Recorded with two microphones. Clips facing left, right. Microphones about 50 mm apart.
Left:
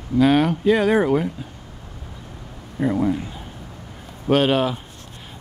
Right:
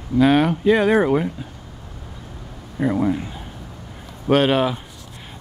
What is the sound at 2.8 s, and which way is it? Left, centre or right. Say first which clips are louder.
Speech: right 1 dB; right.